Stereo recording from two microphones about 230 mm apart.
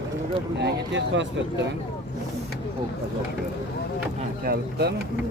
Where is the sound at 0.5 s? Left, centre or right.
Right.